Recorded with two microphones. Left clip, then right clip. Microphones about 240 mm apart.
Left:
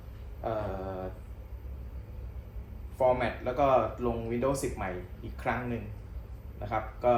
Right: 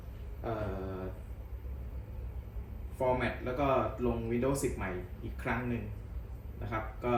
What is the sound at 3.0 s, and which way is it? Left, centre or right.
Speech, centre.